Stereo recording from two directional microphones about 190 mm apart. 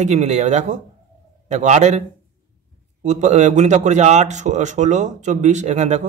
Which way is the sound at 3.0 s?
40° right (ahead or behind).